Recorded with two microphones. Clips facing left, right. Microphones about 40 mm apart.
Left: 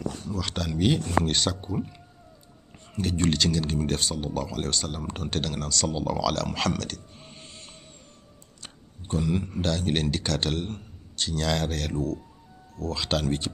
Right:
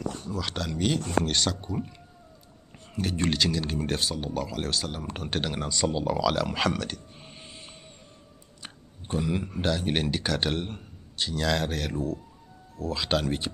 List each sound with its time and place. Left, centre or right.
0.3 s speech: centre